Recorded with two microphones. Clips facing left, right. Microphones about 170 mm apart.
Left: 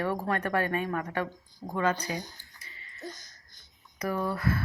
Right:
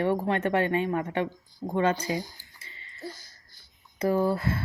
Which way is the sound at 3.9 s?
25° right (ahead or behind).